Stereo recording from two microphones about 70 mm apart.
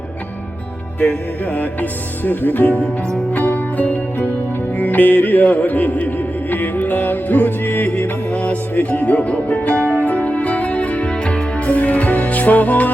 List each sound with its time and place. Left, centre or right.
0.9 s music: centre